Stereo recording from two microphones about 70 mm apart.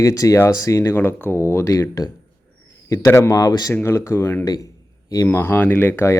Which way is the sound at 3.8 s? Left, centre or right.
Left.